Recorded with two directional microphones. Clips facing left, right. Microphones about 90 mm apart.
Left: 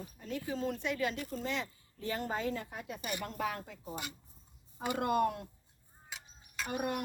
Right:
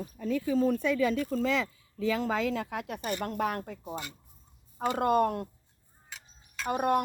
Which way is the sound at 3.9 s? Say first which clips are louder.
Right 3 dB; 20° left (ahead or behind).